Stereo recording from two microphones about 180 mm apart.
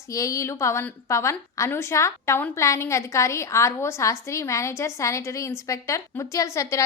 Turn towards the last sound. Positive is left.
turn(degrees=15)  # may be behind; listen again after turning